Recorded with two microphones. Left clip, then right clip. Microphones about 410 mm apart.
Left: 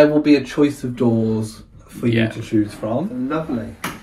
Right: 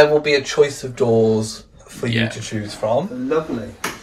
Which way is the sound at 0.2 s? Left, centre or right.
Right.